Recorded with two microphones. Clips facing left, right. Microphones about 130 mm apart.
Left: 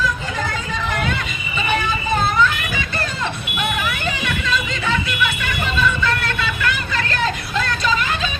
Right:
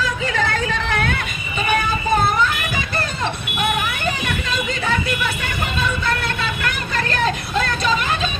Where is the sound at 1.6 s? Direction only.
50° right (ahead or behind).